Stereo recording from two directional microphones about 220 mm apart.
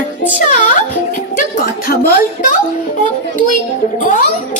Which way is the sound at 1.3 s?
40° left (ahead or behind).